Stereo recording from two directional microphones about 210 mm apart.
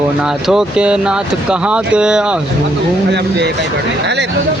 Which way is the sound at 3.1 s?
55° right (ahead or behind).